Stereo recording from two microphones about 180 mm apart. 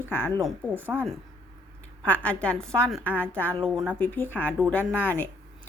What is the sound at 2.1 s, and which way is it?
A woman's voice, 5° left (ahead or behind).